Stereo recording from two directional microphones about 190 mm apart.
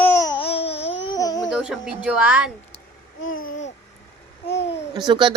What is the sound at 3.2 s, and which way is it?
Babbling, 90° left.